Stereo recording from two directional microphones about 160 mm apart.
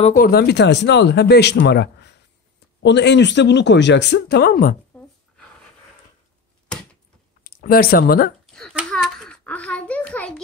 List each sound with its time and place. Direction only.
0.0 s speech: 60° left (ahead or behind)
7.4 s speech: 65° left (ahead or behind)
8.7 s a sound: centre (ahead or behind)